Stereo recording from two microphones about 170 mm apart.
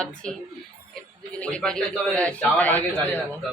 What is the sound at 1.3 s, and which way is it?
A man's voice, 5° left (ahead or behind).